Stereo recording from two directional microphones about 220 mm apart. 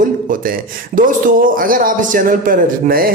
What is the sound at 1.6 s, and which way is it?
Speech, 40° right (ahead or behind).